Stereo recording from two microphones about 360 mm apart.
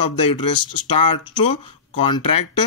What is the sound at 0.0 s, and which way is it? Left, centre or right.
Speech, left.